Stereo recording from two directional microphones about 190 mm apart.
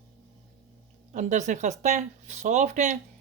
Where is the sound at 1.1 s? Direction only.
40° right (ahead or behind).